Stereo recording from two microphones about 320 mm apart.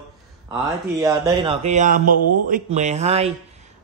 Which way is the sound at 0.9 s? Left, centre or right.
Centre.